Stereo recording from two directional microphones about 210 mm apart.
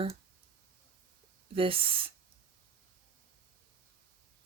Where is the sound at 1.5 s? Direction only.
25° right (ahead or behind).